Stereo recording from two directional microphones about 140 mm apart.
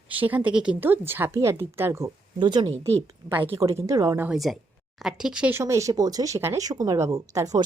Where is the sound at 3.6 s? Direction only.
20° right (ahead or behind).